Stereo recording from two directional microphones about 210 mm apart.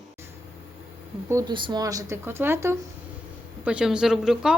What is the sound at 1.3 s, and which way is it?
Speech, 15° right (ahead or behind).